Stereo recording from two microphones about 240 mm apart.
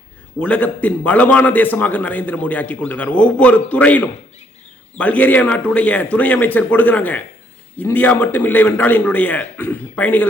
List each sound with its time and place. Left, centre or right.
0.3 s a man's voice: centre